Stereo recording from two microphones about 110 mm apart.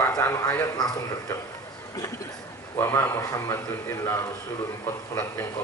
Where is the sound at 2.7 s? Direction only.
20° left (ahead or behind).